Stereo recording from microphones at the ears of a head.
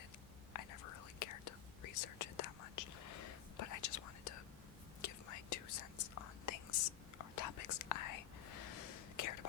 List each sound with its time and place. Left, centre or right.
0.5 s whispering: left